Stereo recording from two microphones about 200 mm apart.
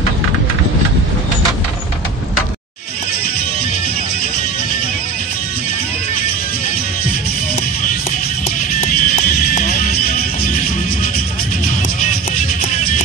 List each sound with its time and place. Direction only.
8.8 s music: 40° left (ahead or behind)